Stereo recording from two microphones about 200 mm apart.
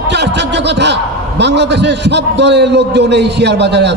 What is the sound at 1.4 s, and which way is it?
A man's voice, 60° right (ahead or behind).